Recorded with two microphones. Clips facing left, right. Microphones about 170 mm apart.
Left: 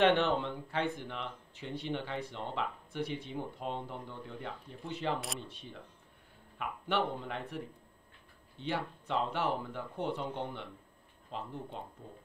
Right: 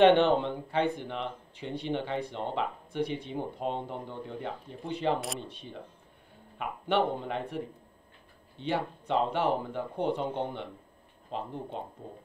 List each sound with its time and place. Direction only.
0.0 s speech: 25° right (ahead or behind)
6.6 s speech: 25° right (ahead or behind)